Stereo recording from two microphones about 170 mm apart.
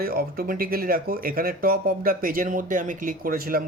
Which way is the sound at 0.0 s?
60° right (ahead or behind).